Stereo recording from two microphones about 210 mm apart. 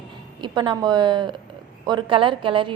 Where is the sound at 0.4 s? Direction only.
20° right (ahead or behind).